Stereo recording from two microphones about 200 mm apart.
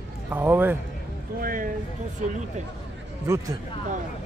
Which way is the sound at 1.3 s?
45° right (ahead or behind).